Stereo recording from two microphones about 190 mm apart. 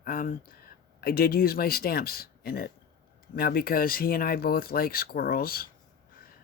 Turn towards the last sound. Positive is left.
turn(degrees=50)  # may be behind; listen again after turning